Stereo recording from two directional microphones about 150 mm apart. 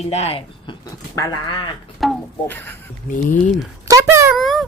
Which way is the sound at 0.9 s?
25° left (ahead or behind).